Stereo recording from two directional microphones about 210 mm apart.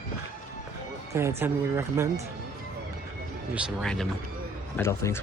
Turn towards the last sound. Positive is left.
turn(degrees=10)  # may be behind; listen again after turning